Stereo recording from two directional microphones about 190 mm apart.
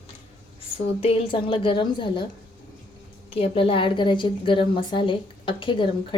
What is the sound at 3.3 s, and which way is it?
A woman's voice, 30° left (ahead or behind).